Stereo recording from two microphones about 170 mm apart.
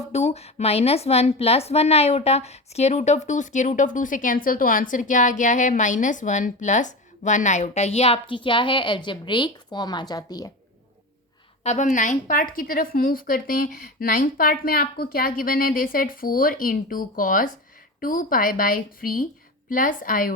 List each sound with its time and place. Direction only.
0.1 s a woman's voice: 40° left (ahead or behind); by 10.5 s 20° left (ahead or behind)
11.6 s a woman's voice: 45° left (ahead or behind)